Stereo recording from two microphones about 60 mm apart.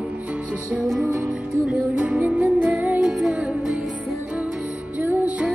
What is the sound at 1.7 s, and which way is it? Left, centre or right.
Music, right.